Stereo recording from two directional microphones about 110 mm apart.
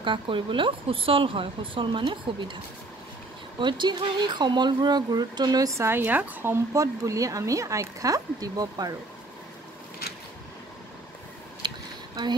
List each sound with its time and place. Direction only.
0.0 s speech: 50° right (ahead or behind)
3.5 s speech: 45° right (ahead or behind)
11.6 s a sound: 40° right (ahead or behind)